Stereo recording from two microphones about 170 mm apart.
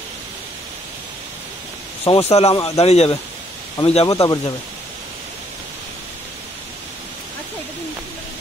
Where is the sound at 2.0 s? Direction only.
35° left (ahead or behind).